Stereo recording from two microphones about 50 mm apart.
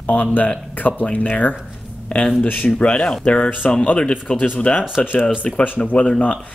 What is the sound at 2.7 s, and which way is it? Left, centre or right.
Speech, centre.